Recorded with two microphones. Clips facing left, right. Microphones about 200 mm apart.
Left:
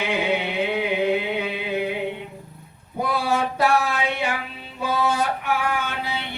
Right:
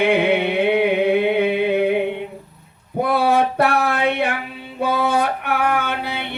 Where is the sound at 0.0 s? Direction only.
60° right (ahead or behind).